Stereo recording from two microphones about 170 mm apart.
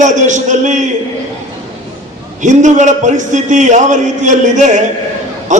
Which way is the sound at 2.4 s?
45° right (ahead or behind).